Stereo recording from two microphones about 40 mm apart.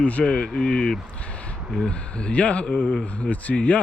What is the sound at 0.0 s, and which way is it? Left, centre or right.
Speech, left.